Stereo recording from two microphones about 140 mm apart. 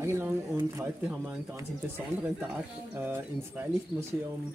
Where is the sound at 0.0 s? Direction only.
15° right (ahead or behind).